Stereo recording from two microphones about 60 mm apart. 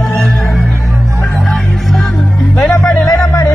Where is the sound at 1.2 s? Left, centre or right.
Left.